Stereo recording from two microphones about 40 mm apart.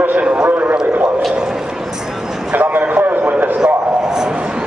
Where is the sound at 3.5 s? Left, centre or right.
Centre.